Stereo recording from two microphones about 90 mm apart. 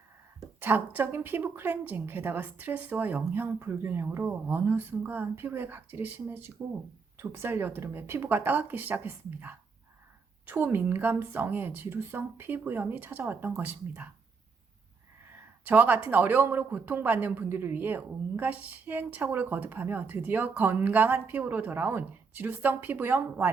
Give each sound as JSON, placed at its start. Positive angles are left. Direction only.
{"t": 0.6, "sound": "speech", "side_deg": -20}
{"t": 15.6, "sound": "speech", "side_deg": -20}